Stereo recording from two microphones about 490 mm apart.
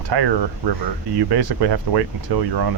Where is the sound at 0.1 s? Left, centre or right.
Right.